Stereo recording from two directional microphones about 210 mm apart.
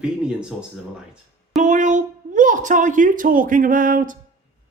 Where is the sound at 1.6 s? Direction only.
35° right (ahead or behind).